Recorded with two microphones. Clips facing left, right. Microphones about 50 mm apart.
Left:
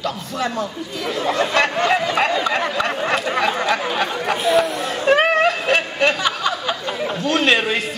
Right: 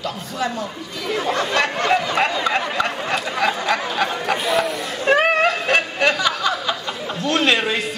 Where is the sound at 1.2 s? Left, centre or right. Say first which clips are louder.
Left 3 dB; left.